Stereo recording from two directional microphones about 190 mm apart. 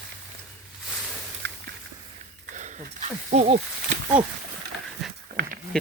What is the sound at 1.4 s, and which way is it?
Walk, 65° right (ahead or behind).